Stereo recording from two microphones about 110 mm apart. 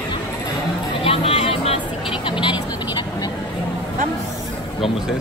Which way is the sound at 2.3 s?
50° left (ahead or behind).